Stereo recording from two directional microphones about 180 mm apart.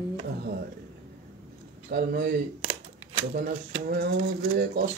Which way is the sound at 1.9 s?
65° right (ahead or behind).